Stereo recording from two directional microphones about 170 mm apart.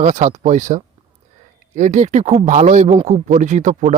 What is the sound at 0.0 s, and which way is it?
Speech, 45° right (ahead or behind).